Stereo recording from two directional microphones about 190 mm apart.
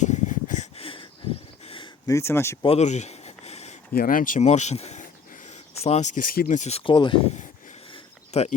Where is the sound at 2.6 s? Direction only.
35° left (ahead or behind).